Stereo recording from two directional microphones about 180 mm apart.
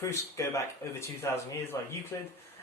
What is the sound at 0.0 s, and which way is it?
Speech, 15° left (ahead or behind).